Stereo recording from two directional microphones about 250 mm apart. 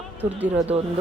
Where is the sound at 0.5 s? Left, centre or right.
Right.